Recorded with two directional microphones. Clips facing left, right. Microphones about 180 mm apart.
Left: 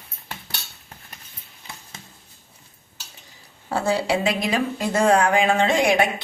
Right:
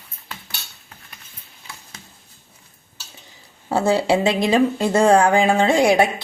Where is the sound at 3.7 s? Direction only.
25° right (ahead or behind).